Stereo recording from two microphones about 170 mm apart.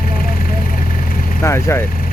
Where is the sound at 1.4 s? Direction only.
15° left (ahead or behind).